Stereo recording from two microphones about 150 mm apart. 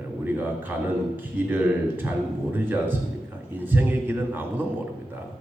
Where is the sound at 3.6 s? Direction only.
15° right (ahead or behind).